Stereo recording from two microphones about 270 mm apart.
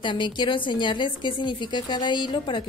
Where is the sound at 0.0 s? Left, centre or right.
Centre.